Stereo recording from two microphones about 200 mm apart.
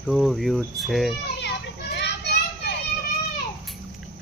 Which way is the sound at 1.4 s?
60° left (ahead or behind).